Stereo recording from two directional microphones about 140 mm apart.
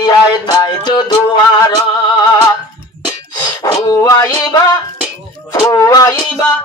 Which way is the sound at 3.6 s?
25° left (ahead or behind).